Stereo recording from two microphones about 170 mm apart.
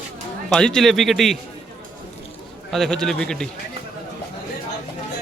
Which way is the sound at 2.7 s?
Centre (ahead or behind).